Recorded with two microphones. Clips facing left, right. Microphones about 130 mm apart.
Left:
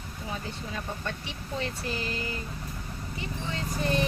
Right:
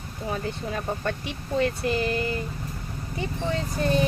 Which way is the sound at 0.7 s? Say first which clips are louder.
Right 6 dB; 55° right (ahead or behind).